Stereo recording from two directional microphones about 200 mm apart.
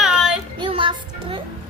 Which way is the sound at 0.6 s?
25° right (ahead or behind).